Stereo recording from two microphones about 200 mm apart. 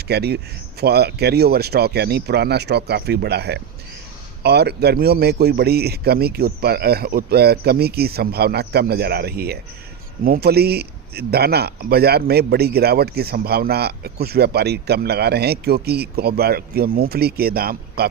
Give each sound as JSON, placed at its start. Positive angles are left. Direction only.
{"t": 0.1, "sound": "a man's voice", "side_deg": -55}